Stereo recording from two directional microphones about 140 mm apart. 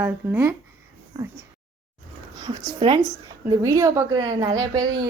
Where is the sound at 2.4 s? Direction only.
35° right (ahead or behind).